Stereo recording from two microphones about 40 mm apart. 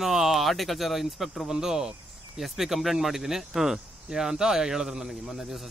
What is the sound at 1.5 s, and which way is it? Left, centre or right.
Speech, centre.